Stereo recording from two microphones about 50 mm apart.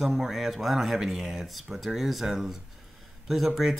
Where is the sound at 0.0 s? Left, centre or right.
Centre.